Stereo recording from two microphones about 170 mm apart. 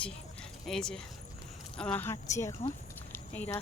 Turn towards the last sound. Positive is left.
turn(degrees=10)  # may be behind; listen again after turning